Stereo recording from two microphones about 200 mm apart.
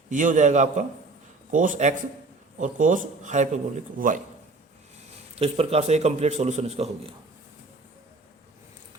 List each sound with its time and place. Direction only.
0.1 s a man's voice: 40° right (ahead or behind)
5.3 s a man's voice: 30° right (ahead or behind)